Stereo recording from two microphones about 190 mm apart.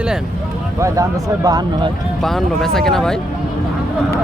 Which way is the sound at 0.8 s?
20° right (ahead or behind).